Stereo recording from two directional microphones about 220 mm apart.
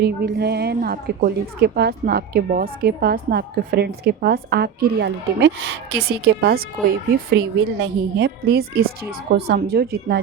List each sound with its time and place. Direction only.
0.0 s a woman's voice: 45° right (ahead or behind)